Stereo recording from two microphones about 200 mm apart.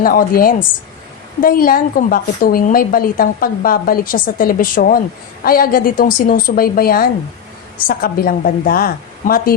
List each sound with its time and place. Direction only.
0.0 s a woman's voice: 45° left (ahead or behind)